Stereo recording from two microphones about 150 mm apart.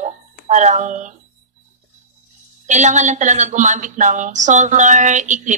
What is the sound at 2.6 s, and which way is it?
Speech, 55° right (ahead or behind).